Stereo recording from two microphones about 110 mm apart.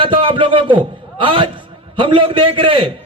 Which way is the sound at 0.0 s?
50° right (ahead or behind).